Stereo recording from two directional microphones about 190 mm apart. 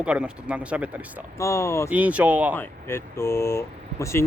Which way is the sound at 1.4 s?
15° left (ahead or behind).